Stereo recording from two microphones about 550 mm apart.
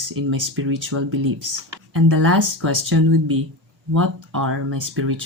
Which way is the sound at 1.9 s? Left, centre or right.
Right.